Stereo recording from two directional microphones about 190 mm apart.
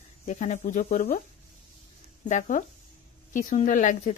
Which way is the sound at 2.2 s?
40° left (ahead or behind).